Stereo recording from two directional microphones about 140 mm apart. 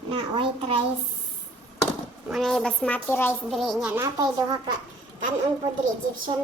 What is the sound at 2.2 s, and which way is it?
A woman's voice, centre (ahead or behind).